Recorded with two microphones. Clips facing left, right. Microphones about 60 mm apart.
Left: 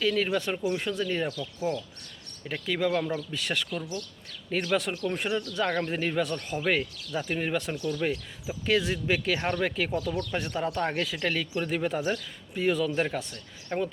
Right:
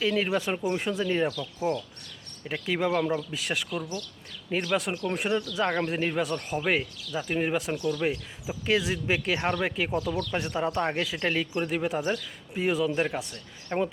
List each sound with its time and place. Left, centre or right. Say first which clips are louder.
0.0 s speech: even; centre
11.7 s speech: left 2 dB; centre
12.5 s speech: even; centre